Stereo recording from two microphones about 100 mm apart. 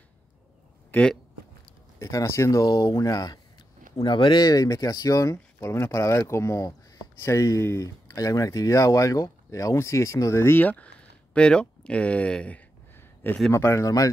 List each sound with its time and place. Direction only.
0.9 s speech: 20° left (ahead or behind)
2.0 s speech: 30° left (ahead or behind)
3.9 s speech: 50° left (ahead or behind); by 10.9 s 20° left (ahead or behind)
11.3 s a sound: 10° left (ahead or behind)
13.5 s speech: 30° left (ahead or behind)